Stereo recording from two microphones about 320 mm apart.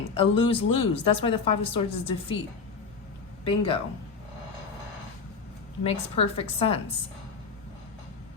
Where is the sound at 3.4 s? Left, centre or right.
Centre.